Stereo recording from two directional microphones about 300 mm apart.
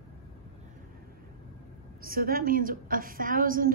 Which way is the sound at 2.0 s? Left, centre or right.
Right.